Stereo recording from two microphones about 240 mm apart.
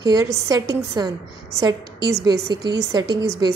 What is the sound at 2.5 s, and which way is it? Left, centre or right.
A woman's voice, centre.